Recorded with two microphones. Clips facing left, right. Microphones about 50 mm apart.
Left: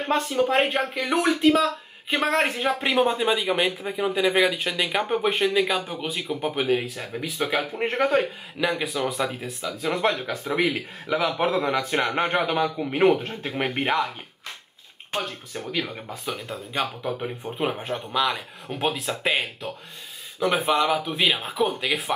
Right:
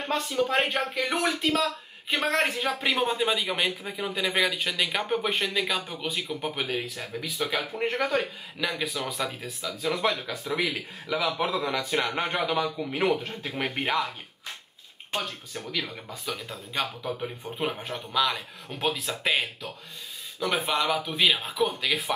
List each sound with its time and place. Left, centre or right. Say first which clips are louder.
0.0 s speech: left 4 dB; centre
7.8 s speech: left 5 dB; left
8.5 s speech: left 5 dB; centre
15.1 s speech: left 3 dB; centre